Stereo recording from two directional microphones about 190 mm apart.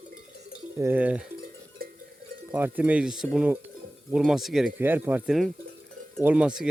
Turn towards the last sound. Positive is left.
turn(degrees=-5)  # may be behind; listen again after turning